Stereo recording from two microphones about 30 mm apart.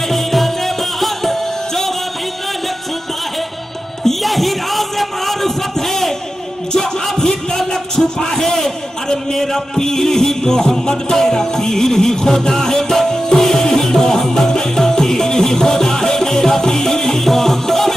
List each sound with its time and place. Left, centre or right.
0.1 s music: centre
4.0 s music: centre
7.2 s a sound: centre
9.1 s music: centre